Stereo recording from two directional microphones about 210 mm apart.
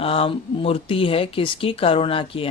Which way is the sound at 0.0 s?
25° left (ahead or behind).